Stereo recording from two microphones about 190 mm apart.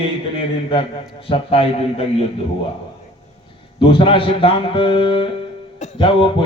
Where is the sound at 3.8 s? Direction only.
30° left (ahead or behind).